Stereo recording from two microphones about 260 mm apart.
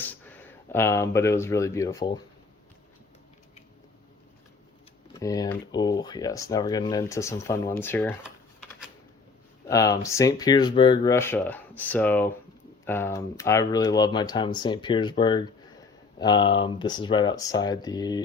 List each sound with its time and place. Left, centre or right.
0.1 s speech: centre
5.1 s speech: centre
9.6 s speech: centre